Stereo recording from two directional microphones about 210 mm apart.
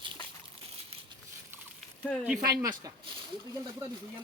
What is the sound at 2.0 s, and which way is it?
Speech, 5° right (ahead or behind).